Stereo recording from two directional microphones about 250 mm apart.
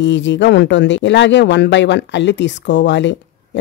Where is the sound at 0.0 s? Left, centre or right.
Left.